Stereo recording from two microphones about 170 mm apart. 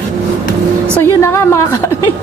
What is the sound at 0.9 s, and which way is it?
Speech, 15° left (ahead or behind).